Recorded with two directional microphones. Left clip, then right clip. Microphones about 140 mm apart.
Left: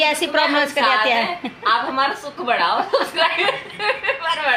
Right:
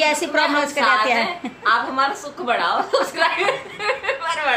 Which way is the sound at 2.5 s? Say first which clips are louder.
Left 1 dB; 25° left (ahead or behind).